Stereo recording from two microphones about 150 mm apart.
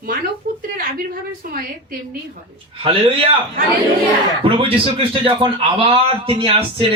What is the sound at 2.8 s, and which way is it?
Speech, 40° right (ahead or behind).